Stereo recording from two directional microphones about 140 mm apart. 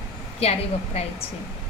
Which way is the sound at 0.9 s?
50° left (ahead or behind).